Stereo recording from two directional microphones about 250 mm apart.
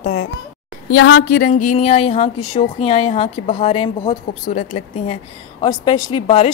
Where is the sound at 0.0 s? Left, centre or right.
Left.